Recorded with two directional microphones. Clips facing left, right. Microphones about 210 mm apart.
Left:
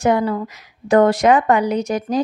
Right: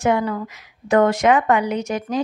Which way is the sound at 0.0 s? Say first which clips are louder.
Left 2 dB; 35° left (ahead or behind).